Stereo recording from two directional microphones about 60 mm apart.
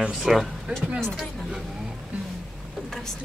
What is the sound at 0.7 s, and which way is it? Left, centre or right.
Speech, centre.